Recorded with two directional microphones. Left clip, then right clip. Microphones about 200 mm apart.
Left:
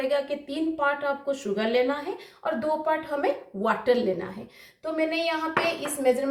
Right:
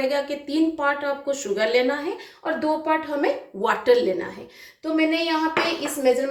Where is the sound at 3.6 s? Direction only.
20° right (ahead or behind).